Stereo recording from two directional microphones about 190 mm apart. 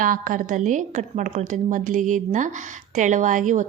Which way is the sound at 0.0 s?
45° right (ahead or behind).